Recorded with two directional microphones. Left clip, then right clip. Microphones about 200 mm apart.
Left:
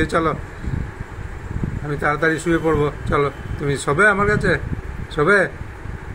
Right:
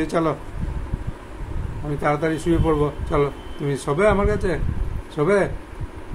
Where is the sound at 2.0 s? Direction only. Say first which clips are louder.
Left 3 dB; 5° right (ahead or behind).